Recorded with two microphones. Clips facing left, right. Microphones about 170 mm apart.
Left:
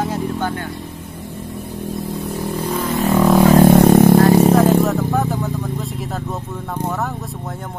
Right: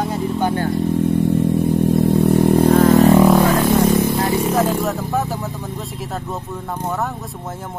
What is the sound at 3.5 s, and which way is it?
Vehicle, 60° left (ahead or behind).